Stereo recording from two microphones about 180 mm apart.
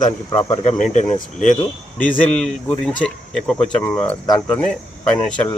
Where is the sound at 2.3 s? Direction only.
5° left (ahead or behind).